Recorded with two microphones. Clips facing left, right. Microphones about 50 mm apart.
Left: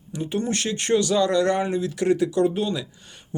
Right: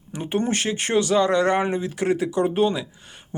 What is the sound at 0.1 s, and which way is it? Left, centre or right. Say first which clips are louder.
Speech: right 2 dB; right.